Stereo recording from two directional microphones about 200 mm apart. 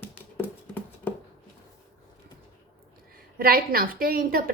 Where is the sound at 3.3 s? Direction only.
45° right (ahead or behind).